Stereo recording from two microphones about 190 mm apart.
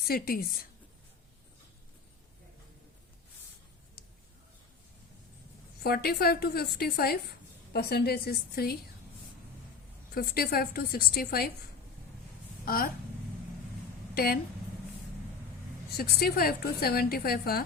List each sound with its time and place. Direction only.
0.0 s a woman's voice: 50° left (ahead or behind)
5.8 s a woman's voice: 55° left (ahead or behind)
10.2 s a woman's voice: 55° left (ahead or behind)
12.6 s speech: 50° left (ahead or behind)
16.0 s a woman's voice: 55° left (ahead or behind)